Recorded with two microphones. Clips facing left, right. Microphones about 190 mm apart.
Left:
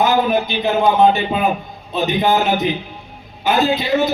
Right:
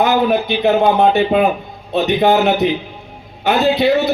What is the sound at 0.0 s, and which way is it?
A man's voice, 60° right (ahead or behind).